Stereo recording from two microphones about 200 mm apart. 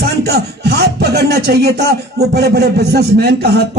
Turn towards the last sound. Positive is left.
turn(degrees=-55)  # may be behind; listen again after turning